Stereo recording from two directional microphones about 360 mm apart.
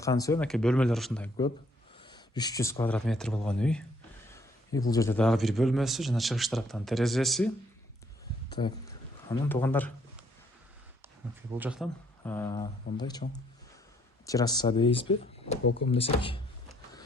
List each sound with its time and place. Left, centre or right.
0.0 s a man's voice: centre
4.3 s a sound: centre
4.9 s a man's voice: centre
8.4 s a man's voice: centre
11.5 s a man's voice: centre